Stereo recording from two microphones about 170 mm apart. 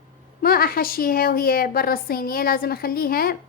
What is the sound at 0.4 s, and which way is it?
A woman's voice, 60° left (ahead or behind).